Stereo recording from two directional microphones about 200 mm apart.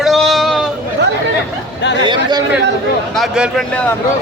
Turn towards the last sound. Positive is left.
turn(degrees=0)  # may be behind; listen again after turning